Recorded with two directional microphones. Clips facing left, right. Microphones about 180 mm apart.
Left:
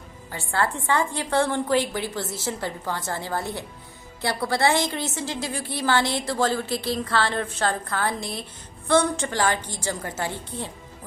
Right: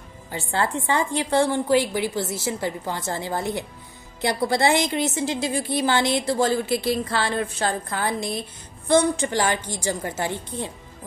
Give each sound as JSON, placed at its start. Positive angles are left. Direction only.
{"t": 0.3, "sound": "a woman's voice", "side_deg": -20}